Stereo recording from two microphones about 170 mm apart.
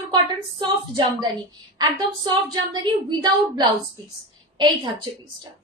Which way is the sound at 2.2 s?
25° right (ahead or behind).